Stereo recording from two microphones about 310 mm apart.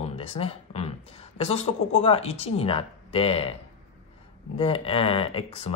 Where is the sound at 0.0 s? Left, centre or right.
Centre.